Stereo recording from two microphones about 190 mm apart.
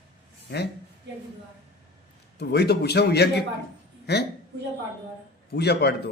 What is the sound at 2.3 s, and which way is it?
A man's voice, 60° left (ahead or behind).